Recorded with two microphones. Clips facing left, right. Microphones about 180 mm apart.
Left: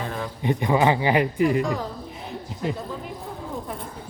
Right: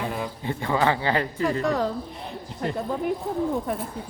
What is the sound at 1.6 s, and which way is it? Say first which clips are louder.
Speech: right 3 dB; 70° right (ahead or behind).